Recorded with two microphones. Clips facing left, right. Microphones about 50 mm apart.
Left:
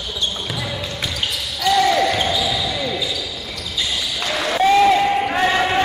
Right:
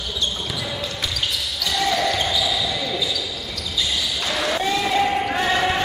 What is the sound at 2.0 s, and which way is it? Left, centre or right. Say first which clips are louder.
Basketball bounce: left 3 dB; left.